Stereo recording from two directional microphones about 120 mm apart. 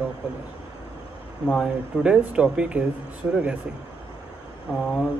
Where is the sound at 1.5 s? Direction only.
5° right (ahead or behind).